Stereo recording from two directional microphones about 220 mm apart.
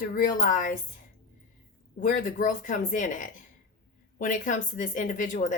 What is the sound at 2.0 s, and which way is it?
A woman's voice, 35° left (ahead or behind).